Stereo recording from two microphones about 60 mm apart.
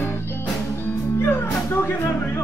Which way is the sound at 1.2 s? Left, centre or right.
Left.